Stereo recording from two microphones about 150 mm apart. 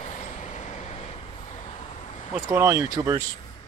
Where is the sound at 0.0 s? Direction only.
55° left (ahead or behind).